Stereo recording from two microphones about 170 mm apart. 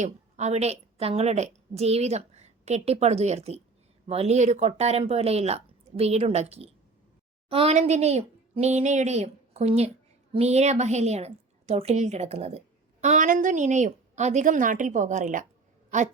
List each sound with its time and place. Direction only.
0.0 s a woman's voice: 40° right (ahead or behind)